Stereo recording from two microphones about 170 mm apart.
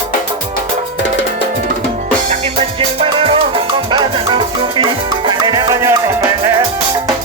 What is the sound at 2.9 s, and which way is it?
Music, 35° right (ahead or behind).